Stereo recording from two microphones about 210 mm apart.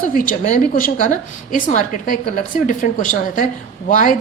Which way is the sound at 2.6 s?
40° left (ahead or behind).